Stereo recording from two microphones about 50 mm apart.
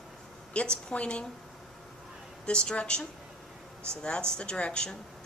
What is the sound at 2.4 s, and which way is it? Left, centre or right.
Speech, centre.